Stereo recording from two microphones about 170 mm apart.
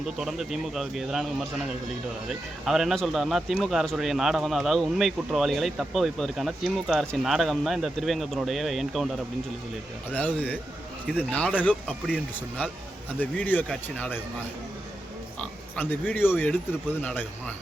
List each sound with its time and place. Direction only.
0.2 s speech: centre (ahead or behind)
2.6 s speech: centre (ahead or behind)
10.1 s speech: 10° left (ahead or behind)
15.4 s speech: 10° left (ahead or behind)